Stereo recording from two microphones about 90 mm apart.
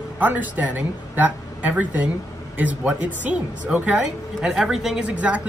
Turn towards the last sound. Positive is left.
turn(degrees=-15)  # may be behind; listen again after turning